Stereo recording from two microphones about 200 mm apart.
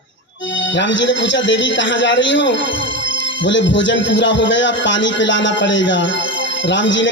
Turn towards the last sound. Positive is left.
turn(degrees=65)  # may be behind; listen again after turning